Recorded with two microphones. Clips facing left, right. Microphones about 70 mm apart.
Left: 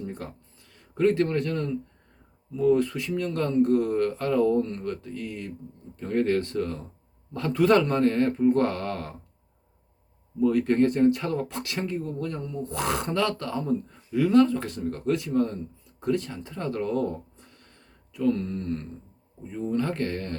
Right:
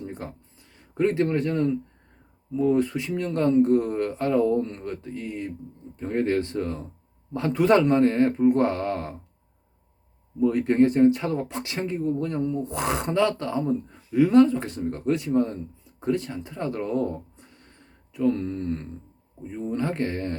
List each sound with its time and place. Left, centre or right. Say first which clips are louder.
0.0 s a sound: even; centre
0.7 s speech: left 1 dB; centre
10.4 s speech: right 2 dB; centre